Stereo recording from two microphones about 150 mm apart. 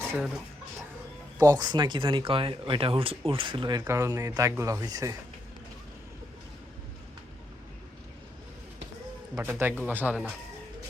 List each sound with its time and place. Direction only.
1.4 s speech: 25° right (ahead or behind)
9.3 s speech: 15° right (ahead or behind)